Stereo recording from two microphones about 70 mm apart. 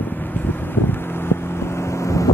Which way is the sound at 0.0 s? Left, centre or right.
Left.